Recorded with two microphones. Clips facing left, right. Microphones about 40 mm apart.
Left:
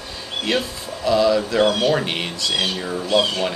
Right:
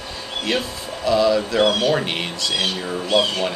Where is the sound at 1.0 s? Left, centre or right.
Centre.